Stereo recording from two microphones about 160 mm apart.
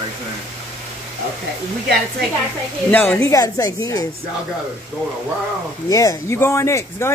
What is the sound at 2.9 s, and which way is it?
Speech, 10° left (ahead or behind).